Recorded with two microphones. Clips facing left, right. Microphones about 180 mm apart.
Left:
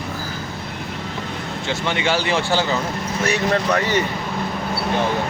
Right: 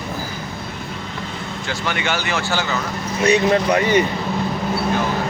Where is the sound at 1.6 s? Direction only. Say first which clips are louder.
Left 2 dB; 25° left (ahead or behind).